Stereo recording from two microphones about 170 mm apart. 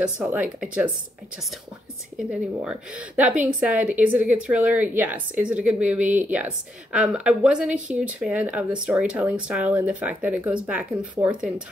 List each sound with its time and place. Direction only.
0.0 s speech: 5° right (ahead or behind)
2.1 s a woman's voice: 5° right (ahead or behind)